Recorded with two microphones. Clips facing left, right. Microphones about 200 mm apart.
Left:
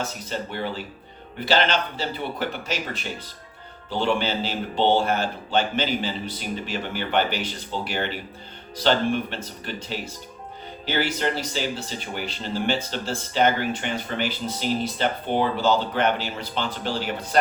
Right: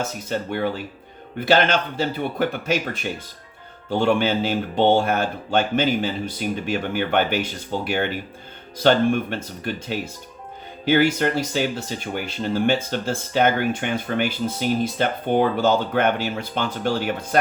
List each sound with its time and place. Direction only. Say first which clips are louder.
0.3 s speech: right 8 dB; 50° right (ahead or behind)